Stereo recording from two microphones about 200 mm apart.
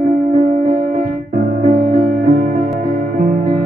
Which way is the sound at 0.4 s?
45° right (ahead or behind).